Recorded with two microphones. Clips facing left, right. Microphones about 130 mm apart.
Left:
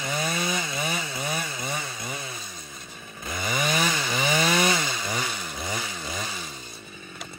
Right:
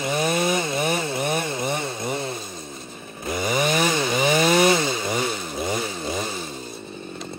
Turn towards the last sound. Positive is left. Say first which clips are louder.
# right 7 dB
turn(degrees=0)  # may be behind; listen again after turning